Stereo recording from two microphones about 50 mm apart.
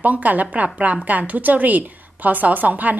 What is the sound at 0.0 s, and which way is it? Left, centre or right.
Speech, right.